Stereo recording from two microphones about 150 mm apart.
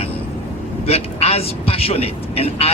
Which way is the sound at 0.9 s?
45° left (ahead or behind).